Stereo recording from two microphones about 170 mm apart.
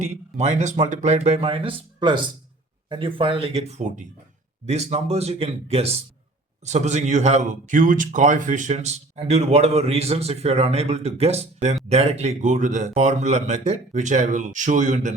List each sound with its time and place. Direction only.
0.0 s a man's voice: 40° right (ahead or behind)